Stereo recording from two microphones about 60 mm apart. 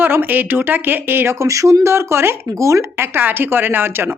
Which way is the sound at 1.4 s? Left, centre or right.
Right.